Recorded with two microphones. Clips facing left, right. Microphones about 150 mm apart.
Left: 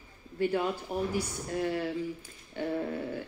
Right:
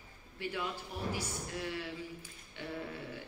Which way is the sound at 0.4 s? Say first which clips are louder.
Left 10 dB; 45° left (ahead or behind).